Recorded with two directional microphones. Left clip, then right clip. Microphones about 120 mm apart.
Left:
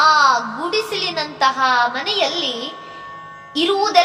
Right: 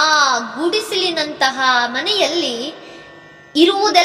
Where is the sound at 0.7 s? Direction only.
30° right (ahead or behind).